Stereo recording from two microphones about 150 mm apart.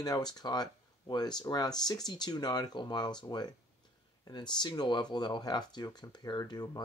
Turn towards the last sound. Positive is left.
turn(degrees=30)  # may be behind; listen again after turning